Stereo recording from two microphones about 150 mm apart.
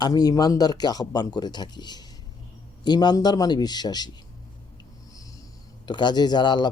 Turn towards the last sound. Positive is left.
turn(degrees=30)  # may be behind; listen again after turning